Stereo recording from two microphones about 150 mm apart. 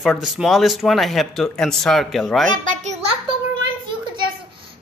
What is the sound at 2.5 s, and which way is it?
Speech, 55° right (ahead or behind).